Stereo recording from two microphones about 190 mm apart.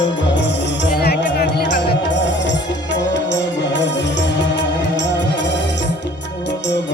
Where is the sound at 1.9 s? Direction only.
70° left (ahead or behind).